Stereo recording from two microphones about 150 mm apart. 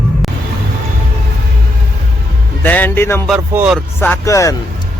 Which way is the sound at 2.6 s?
10° left (ahead or behind).